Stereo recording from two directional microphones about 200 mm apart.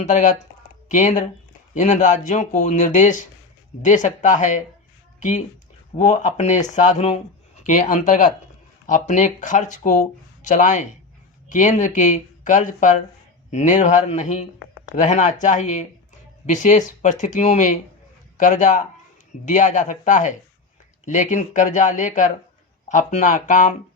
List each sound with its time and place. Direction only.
0.1 s speech: 40° left (ahead or behind)
6.0 s speech: 35° left (ahead or behind)